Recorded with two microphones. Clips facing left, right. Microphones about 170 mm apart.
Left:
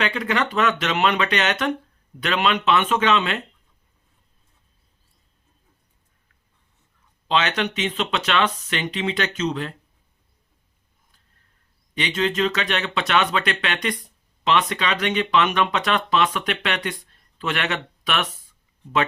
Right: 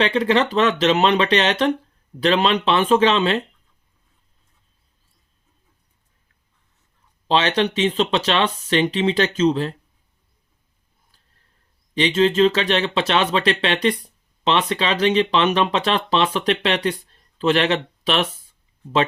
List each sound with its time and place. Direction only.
0.0 s speech: 30° right (ahead or behind)
7.3 s speech: 30° right (ahead or behind)
11.9 s speech: 30° right (ahead or behind)